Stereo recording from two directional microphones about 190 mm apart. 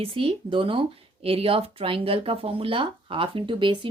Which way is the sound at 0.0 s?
30° right (ahead or behind).